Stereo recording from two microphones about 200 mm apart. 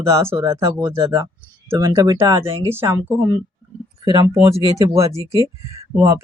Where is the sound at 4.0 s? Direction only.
25° right (ahead or behind).